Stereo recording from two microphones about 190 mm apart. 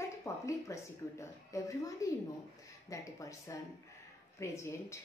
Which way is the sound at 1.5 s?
15° left (ahead or behind).